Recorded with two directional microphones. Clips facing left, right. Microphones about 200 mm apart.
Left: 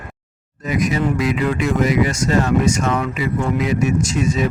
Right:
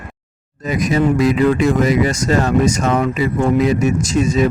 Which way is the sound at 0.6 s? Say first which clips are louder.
Right 3 dB; 35° right (ahead or behind).